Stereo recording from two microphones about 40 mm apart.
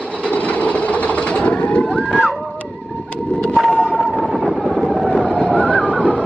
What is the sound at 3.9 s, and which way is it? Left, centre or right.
Vehicle, centre.